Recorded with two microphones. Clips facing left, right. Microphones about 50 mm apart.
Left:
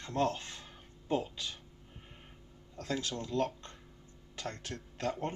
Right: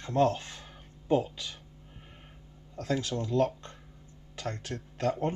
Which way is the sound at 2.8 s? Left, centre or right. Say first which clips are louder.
Right 5 dB; right.